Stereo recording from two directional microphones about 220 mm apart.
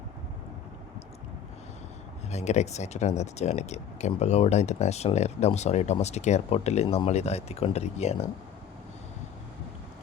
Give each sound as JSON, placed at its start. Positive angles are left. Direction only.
{"t": 2.3, "sound": "speech", "side_deg": 30}